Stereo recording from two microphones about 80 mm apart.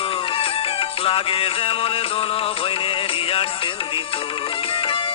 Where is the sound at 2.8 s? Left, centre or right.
Left.